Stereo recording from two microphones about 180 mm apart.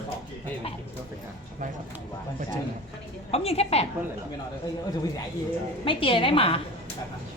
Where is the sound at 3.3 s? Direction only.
35° left (ahead or behind).